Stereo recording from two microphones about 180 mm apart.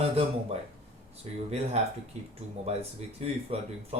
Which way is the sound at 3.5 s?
35° right (ahead or behind).